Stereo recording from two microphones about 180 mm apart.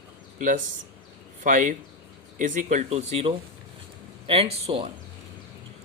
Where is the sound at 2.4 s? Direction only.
45° right (ahead or behind).